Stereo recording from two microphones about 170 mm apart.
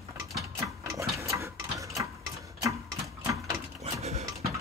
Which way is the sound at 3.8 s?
40° right (ahead or behind).